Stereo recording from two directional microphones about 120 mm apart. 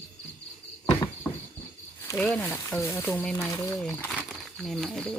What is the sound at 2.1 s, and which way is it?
Speech, 15° left (ahead or behind).